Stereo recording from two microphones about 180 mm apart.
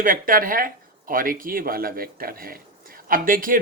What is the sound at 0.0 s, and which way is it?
Speech, 50° right (ahead or behind).